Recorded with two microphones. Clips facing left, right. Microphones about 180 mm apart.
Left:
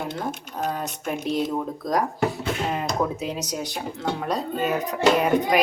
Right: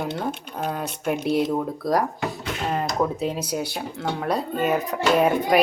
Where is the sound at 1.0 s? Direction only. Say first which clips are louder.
Right 4 dB; 5° right (ahead or behind).